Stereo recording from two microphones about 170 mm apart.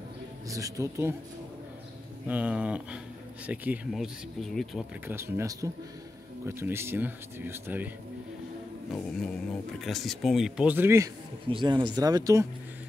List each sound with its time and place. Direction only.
0.5 s speech: 20° right (ahead or behind)
2.2 s speech: 10° right (ahead or behind)
5.0 s speech: 15° right (ahead or behind)
8.9 s speech: 5° left (ahead or behind); by 11.1 s 15° right (ahead or behind)
11.4 s speech: 25° right (ahead or behind)